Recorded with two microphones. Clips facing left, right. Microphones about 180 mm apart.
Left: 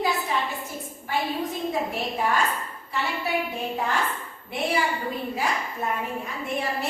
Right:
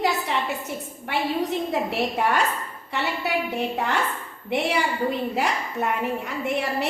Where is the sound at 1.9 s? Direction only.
75° right (ahead or behind).